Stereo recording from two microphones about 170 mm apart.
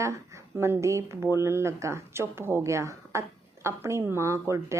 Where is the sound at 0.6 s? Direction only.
15° right (ahead or behind).